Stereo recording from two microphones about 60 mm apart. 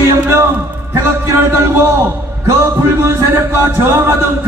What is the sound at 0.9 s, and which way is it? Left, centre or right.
Speech, right.